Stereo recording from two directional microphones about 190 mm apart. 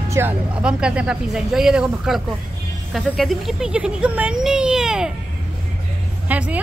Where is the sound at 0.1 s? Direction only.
10° right (ahead or behind).